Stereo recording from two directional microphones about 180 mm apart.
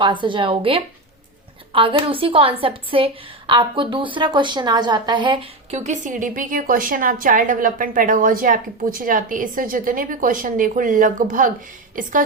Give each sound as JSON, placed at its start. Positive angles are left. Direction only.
{"t": 0.0, "sound": "a woman's voice", "side_deg": -25}